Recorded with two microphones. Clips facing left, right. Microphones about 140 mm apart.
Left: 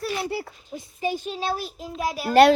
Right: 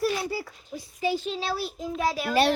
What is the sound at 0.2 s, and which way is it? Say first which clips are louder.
Speech: left 2 dB; 65° left (ahead or behind).